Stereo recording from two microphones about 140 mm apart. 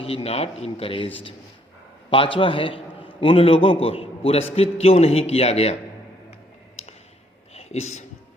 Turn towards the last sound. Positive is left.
turn(degrees=50)  # may be behind; listen again after turning